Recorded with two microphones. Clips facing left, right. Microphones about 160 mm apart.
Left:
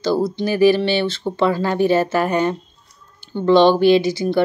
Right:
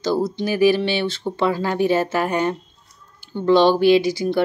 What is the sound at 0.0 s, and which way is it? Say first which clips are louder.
Speech: left 2 dB; 15° right (ahead or behind).